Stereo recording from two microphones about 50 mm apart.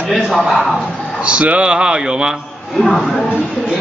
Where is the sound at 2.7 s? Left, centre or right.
Centre.